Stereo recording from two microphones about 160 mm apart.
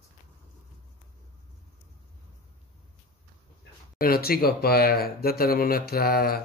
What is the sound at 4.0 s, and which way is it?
Speech, 70° left (ahead or behind).